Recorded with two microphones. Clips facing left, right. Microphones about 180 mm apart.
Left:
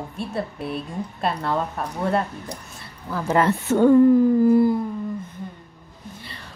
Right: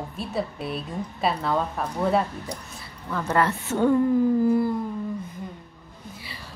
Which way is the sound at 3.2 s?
20° left (ahead or behind).